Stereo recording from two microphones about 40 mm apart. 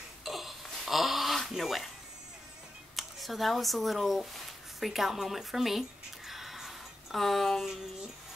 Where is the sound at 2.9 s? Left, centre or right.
Centre.